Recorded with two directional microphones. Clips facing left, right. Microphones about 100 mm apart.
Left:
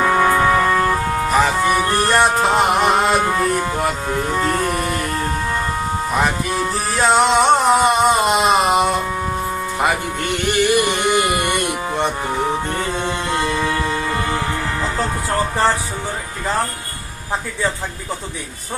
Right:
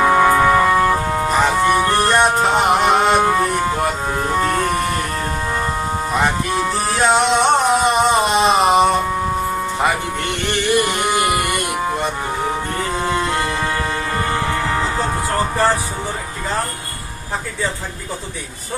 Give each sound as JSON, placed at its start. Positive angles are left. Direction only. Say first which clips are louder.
{"t": 0.0, "sound": "music", "louder": "right 2 dB", "side_deg": -15}
{"t": 1.4, "sound": "music", "louder": "right 1 dB", "side_deg": 0}
{"t": 3.2, "sound": "music", "louder": "right 3 dB", "side_deg": -20}
{"t": 6.5, "sound": "music", "louder": "right 2 dB", "side_deg": 0}
{"t": 10.5, "sound": "music", "louder": "left 1 dB", "side_deg": 15}